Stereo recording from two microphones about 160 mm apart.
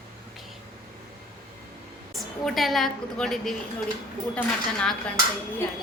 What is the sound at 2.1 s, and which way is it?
A woman's voice, centre (ahead or behind).